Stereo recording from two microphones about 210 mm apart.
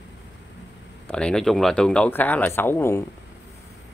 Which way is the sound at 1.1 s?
5° left (ahead or behind).